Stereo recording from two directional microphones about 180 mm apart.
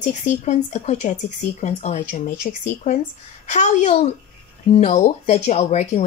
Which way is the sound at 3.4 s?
40° left (ahead or behind).